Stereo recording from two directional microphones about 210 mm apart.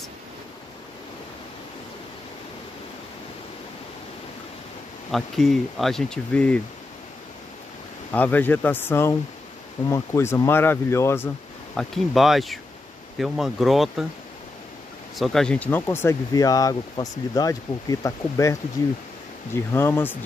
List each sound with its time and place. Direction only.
5.1 s speech: centre (ahead or behind)
8.1 s speech: 10° left (ahead or behind)
11.7 s speech: centre (ahead or behind)
15.1 s speech: centre (ahead or behind)